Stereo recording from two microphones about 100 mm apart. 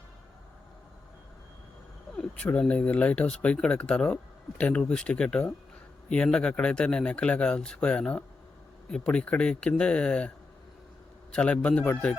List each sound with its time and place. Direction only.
2.1 s speech: 10° left (ahead or behind)
11.3 s speech: 10° left (ahead or behind)